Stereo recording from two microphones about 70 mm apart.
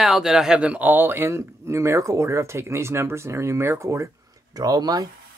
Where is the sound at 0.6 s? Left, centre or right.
Right.